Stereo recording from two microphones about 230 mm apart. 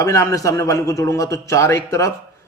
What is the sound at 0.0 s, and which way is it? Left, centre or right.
A man's voice, centre.